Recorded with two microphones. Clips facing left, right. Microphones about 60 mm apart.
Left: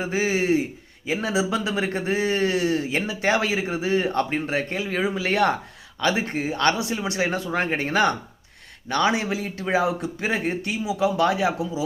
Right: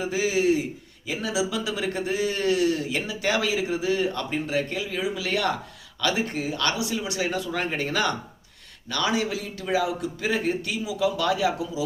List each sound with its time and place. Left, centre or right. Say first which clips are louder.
0.0 s speech: even; left